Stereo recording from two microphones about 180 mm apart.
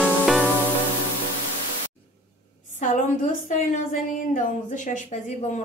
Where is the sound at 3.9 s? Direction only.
45° left (ahead or behind).